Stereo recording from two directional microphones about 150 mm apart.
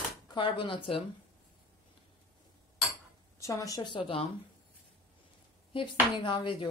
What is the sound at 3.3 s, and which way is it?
Speech, 20° left (ahead or behind).